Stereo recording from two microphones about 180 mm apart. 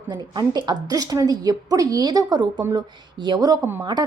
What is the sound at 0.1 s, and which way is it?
Speech, 25° right (ahead or behind).